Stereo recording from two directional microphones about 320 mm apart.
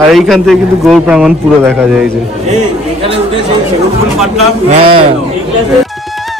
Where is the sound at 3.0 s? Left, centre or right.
Centre.